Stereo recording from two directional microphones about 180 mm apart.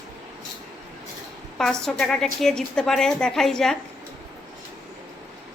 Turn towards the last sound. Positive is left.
turn(degrees=5)  # may be behind; listen again after turning